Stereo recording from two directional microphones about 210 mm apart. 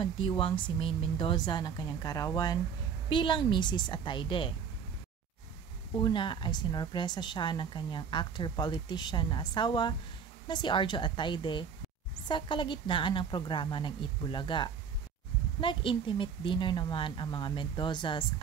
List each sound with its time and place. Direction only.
0.0 s a woman's voice: 25° left (ahead or behind)
5.9 s a woman's voice: 20° left (ahead or behind)